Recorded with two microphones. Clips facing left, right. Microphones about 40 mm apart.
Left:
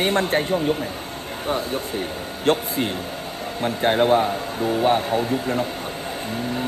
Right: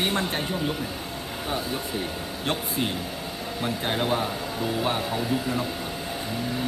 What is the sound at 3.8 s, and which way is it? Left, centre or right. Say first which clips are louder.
A man's voice: left 10 dB; left.